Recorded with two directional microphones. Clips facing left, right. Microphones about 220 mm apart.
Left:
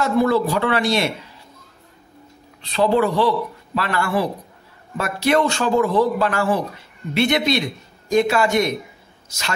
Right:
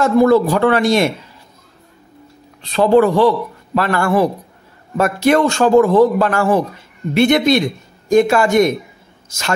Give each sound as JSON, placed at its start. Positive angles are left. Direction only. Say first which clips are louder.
{"t": 0.0, "sound": "a man's voice", "louder": "right 6 dB", "side_deg": -45}
{"t": 2.7, "sound": "a man's voice", "louder": "right 6 dB", "side_deg": -50}